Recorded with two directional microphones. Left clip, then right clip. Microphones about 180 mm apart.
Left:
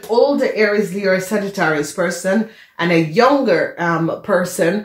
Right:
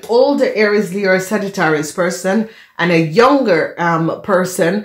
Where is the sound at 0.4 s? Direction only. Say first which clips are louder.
Right 2 dB; 50° right (ahead or behind).